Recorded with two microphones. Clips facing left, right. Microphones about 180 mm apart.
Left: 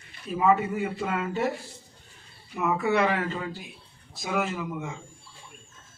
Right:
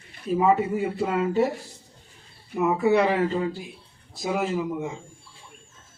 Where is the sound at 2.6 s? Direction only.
30° right (ahead or behind).